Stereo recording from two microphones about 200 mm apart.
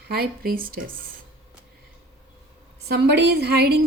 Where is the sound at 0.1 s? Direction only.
50° right (ahead or behind).